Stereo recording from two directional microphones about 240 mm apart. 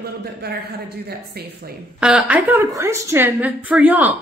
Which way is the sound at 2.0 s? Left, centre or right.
Centre.